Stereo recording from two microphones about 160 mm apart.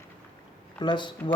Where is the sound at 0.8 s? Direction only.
30° left (ahead or behind).